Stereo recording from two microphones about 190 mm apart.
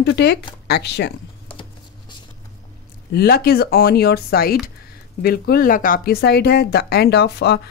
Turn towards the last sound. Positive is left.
turn(degrees=60)  # may be behind; listen again after turning